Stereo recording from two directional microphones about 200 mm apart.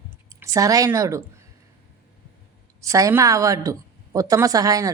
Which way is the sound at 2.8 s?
15° right (ahead or behind).